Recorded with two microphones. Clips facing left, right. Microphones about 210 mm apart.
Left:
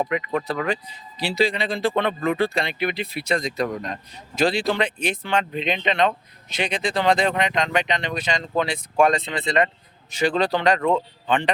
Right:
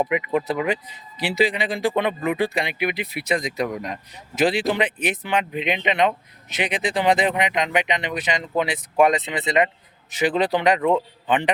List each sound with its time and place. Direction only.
0.0 s speech: 10° right (ahead or behind)